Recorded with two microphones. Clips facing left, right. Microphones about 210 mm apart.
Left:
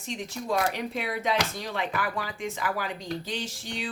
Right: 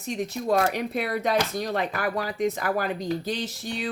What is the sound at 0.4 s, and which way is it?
Speech, 45° right (ahead or behind).